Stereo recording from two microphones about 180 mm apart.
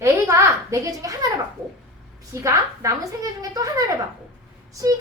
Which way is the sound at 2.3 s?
15° right (ahead or behind).